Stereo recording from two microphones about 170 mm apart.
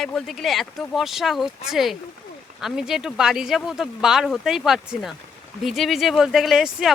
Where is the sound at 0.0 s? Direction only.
Centre (ahead or behind).